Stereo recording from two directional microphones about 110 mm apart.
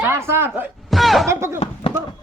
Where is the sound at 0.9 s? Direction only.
Centre (ahead or behind).